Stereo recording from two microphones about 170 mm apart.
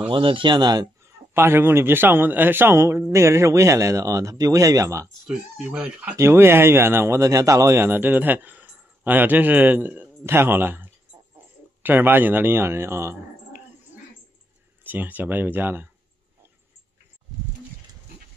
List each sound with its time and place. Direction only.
0.1 s speech: 30° right (ahead or behind)
1.3 s speech: 15° right (ahead or behind)
5.2 s speech: 5° right (ahead or behind)
14.8 s speech: 10° right (ahead or behind)